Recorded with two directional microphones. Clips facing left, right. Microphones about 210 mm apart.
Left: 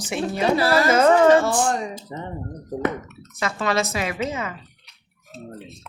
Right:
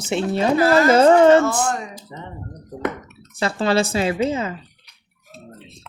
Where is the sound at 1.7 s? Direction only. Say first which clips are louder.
Left 1 dB; 35° left (ahead or behind).